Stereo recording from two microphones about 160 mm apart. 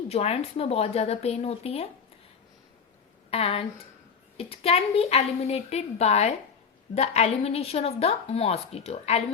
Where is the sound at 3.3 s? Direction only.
40° left (ahead or behind).